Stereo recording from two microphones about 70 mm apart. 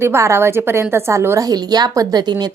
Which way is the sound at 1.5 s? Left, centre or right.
Right.